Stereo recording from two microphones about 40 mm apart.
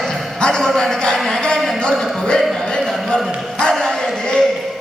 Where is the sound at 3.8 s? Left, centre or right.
Centre.